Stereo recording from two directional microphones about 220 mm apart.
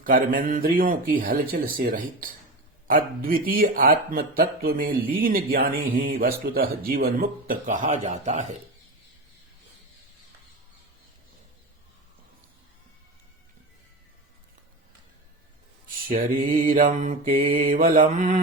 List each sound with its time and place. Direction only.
0.0 s speech: 40° right (ahead or behind)
16.0 s speech: 40° right (ahead or behind)